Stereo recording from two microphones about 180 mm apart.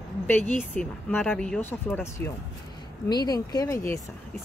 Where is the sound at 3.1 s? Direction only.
20° left (ahead or behind).